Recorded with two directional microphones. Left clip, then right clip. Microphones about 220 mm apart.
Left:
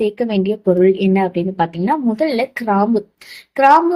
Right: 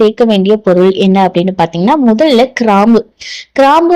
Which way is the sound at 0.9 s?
35° right (ahead or behind).